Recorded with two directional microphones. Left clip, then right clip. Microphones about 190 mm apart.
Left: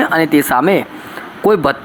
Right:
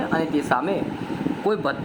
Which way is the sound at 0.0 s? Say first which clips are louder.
Left 11 dB; 20° left (ahead or behind).